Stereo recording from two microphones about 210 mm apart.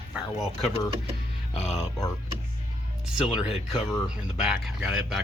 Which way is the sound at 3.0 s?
Centre (ahead or behind).